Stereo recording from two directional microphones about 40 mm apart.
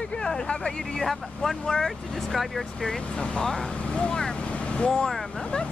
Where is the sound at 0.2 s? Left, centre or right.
Centre.